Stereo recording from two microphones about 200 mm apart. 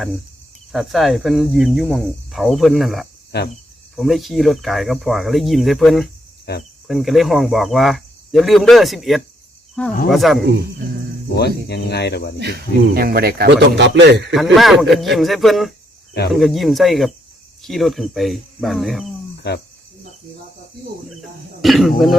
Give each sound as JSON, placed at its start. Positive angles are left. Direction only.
{"t": 0.7, "sound": "cricket", "side_deg": 0}
{"t": 3.3, "sound": "speech", "side_deg": 55}
{"t": 3.9, "sound": "cricket", "side_deg": 0}
{"t": 6.5, "sound": "speech", "side_deg": 55}
{"t": 6.8, "sound": "cricket", "side_deg": 0}
{"t": 11.3, "sound": "speech", "side_deg": 55}
{"t": 12.4, "sound": "speech", "side_deg": -55}
{"t": 14.3, "sound": "cricket", "side_deg": 0}
{"t": 21.6, "sound": "cricket", "side_deg": 0}